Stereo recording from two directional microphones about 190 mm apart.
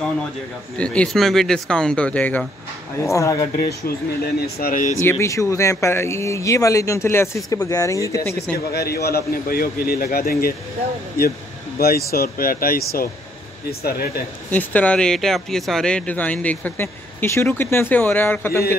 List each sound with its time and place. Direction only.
0.7 s speech: 5° left (ahead or behind)
3.5 s a man's voice: 50° left (ahead or behind)
5.0 s speech: 15° left (ahead or behind)
8.7 s a man's voice: 55° left (ahead or behind)
12.1 s a man's voice: 50° left (ahead or behind)
14.5 s speech: 10° left (ahead or behind)